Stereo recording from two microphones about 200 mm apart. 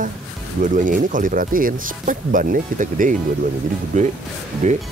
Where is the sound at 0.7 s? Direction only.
40° right (ahead or behind).